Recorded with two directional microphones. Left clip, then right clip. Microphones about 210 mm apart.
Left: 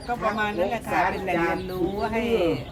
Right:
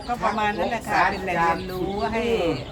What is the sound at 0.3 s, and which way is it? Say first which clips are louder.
Speech: right 1 dB; 15° left (ahead or behind).